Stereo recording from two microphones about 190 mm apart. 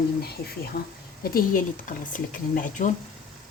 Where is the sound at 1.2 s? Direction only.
45° left (ahead or behind).